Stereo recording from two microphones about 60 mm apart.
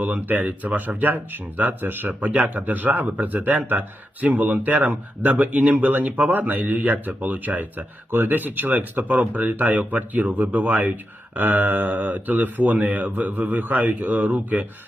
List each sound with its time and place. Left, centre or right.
0.0 s speech: right